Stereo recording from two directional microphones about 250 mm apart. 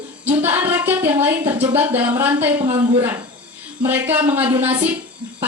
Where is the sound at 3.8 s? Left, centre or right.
Centre.